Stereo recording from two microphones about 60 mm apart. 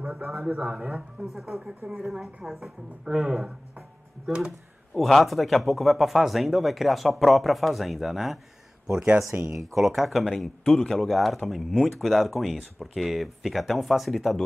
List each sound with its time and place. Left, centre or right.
0.0 s speech: centre
1.2 s speech: centre
8.9 s speech: centre
9.6 s speech: centre